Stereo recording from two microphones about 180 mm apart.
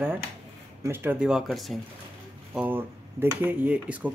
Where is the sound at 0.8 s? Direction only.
10° right (ahead or behind).